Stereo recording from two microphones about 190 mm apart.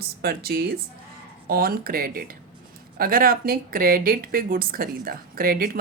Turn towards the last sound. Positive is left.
turn(degrees=-50)  # may be behind; listen again after turning